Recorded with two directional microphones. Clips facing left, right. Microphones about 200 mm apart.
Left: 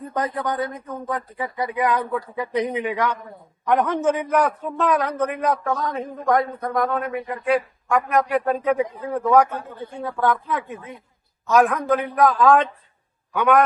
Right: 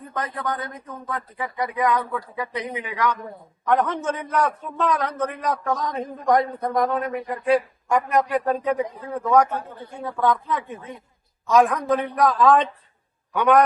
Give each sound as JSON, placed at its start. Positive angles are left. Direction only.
{"t": 0.1, "sound": "speech", "side_deg": 30}
{"t": 3.7, "sound": "a man's voice", "side_deg": 10}